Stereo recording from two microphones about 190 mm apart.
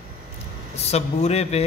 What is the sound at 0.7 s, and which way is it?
Speech, 35° left (ahead or behind).